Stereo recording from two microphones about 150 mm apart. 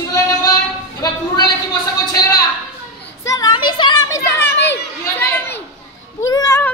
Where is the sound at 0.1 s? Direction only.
25° left (ahead or behind).